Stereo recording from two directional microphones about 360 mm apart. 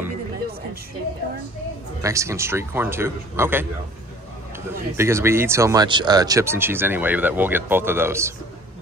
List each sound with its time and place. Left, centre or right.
2.0 s speech: centre
4.6 s speech: centre